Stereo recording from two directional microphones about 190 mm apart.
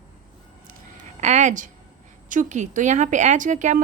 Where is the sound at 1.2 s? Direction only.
40° right (ahead or behind).